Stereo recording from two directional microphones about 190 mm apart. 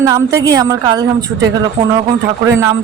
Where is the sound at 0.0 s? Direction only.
15° right (ahead or behind).